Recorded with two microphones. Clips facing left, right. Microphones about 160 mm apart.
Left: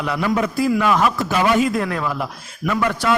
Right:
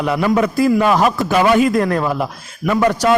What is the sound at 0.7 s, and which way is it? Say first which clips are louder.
Speech: right 3 dB; 35° right (ahead or behind).